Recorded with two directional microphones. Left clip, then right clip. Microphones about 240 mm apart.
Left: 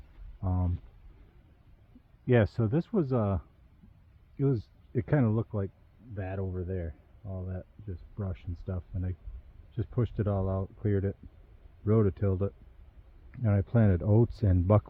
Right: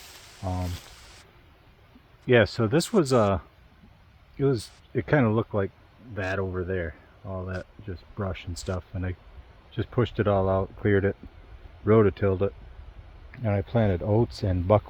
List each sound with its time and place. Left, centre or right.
0.4 s speech: centre
2.2 s speech: centre
4.4 s speech: centre
7.3 s speech: centre
7.5 s speech: centre
13.3 s speech: centre